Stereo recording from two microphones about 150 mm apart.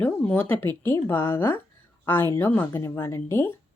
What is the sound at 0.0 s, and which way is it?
Speech, 10° left (ahead or behind).